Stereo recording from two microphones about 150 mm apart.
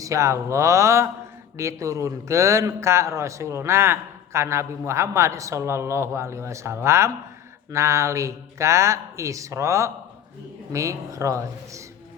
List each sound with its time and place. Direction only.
0.0 s a man's voice: 20° right (ahead or behind)